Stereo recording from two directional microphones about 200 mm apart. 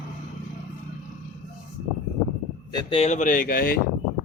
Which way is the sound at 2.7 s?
25° left (ahead or behind).